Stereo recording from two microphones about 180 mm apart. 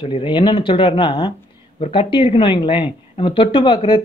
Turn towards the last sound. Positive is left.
turn(degrees=30)  # may be behind; listen again after turning